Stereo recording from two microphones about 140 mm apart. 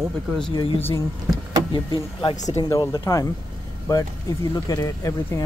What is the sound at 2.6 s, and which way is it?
Speech, 30° left (ahead or behind).